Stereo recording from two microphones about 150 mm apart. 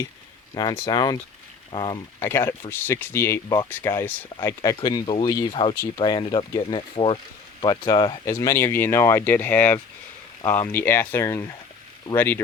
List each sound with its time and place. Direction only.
0.5 s speech: 25° left (ahead or behind)
2.2 s speech: 15° left (ahead or behind)